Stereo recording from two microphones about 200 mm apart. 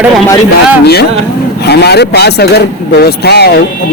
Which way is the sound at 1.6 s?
55° left (ahead or behind).